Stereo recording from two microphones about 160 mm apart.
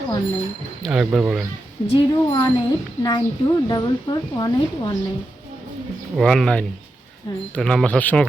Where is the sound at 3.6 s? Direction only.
25° left (ahead or behind).